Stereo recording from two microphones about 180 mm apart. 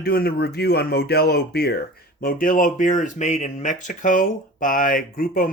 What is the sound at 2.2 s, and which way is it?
Speech, 50° left (ahead or behind).